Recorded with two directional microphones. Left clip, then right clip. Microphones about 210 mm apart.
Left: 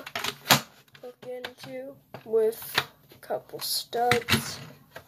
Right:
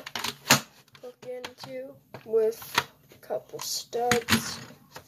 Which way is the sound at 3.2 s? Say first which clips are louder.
Left 1 dB; 10° left (ahead or behind).